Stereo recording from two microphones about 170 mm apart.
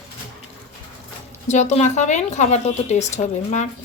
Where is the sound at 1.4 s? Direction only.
45° left (ahead or behind).